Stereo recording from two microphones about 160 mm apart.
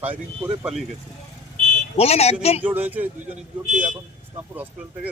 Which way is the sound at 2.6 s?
10° right (ahead or behind).